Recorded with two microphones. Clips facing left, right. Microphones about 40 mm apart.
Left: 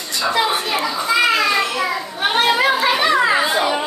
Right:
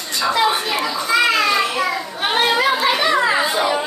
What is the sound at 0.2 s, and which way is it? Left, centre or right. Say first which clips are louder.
Children playing: right 1 dB; centre.